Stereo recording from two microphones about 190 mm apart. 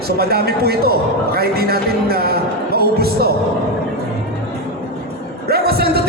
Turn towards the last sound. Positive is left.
turn(degrees=-55)  # may be behind; listen again after turning